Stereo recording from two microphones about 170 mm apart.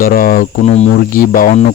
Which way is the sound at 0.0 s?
55° left (ahead or behind).